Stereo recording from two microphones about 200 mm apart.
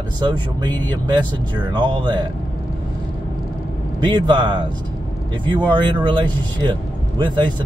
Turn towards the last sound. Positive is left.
turn(degrees=-20)  # may be behind; listen again after turning